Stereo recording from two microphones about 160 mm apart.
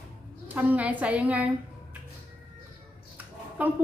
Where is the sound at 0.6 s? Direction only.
10° right (ahead or behind).